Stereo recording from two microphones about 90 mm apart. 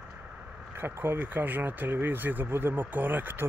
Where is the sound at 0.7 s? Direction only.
25° right (ahead or behind).